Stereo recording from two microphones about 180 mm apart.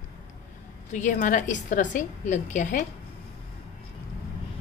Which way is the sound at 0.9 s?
45° left (ahead or behind).